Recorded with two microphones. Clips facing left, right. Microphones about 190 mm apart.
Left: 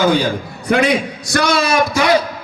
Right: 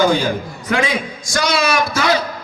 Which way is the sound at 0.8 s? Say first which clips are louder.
Left 5 dB; 65° left (ahead or behind).